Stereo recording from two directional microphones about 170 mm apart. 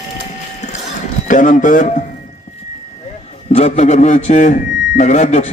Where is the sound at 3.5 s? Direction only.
40° left (ahead or behind).